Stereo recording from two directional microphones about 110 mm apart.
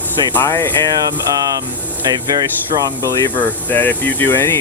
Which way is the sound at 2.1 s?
35° right (ahead or behind).